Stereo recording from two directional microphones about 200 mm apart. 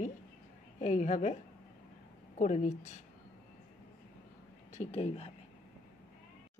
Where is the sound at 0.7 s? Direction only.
35° left (ahead or behind).